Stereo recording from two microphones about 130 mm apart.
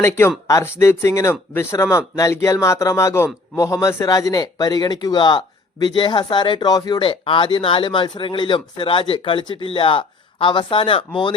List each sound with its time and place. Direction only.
0.0 s speech: 20° left (ahead or behind); by 11.3 s 40° left (ahead or behind)